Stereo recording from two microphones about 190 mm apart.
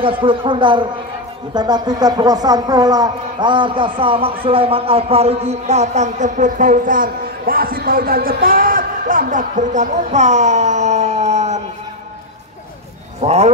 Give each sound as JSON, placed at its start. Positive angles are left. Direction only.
{"t": 0.2, "sound": "speech", "side_deg": -25}
{"t": 13.2, "sound": "speech", "side_deg": -35}